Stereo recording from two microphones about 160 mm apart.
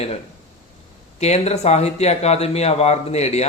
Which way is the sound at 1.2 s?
45° left (ahead or behind).